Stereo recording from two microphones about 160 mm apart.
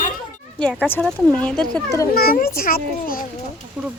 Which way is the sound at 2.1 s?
70° left (ahead or behind).